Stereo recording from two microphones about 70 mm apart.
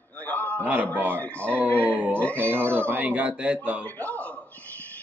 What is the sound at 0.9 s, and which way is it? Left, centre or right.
A man's voice, right.